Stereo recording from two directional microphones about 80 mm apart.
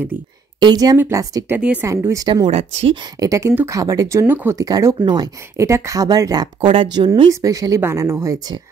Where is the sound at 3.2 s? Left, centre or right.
Right.